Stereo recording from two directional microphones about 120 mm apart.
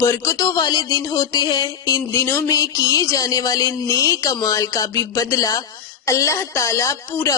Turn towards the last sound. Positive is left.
turn(degrees=25)  # may be behind; listen again after turning